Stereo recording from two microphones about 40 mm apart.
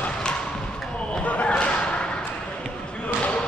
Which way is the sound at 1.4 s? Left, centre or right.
Left.